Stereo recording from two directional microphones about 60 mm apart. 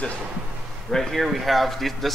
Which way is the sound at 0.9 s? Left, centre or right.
Centre.